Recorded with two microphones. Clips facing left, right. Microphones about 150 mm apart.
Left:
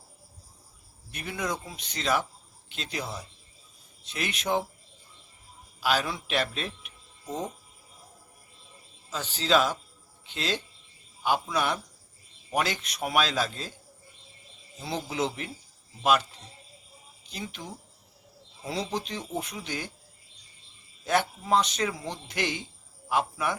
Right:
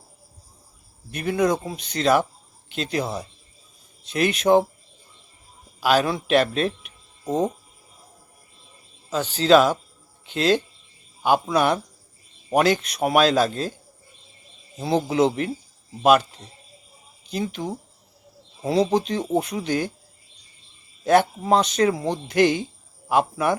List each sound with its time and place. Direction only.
1.1 s a man's voice: 60° right (ahead or behind)
5.8 s speech: 60° right (ahead or behind)
9.0 s speech: 65° right (ahead or behind)
10.2 s a man's voice: 55° right (ahead or behind)
14.8 s speech: 70° right (ahead or behind)
17.3 s a man's voice: 50° right (ahead or behind)
21.0 s a man's voice: 50° right (ahead or behind)